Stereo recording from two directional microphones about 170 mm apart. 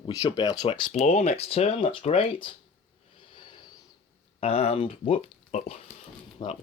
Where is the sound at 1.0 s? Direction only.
40° left (ahead or behind).